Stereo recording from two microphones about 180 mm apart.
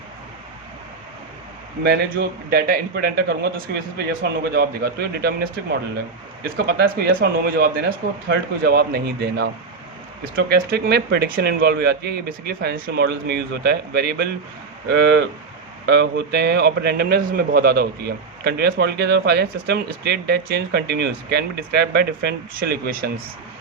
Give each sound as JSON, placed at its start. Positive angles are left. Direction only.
{"t": 1.8, "sound": "a man's voice", "side_deg": -65}